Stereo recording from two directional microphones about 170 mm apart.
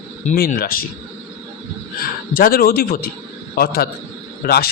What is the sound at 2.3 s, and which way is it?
Speech, 60° left (ahead or behind).